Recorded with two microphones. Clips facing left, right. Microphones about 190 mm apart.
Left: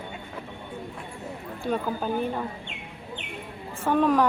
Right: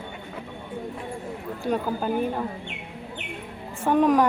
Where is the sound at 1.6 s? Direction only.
10° right (ahead or behind).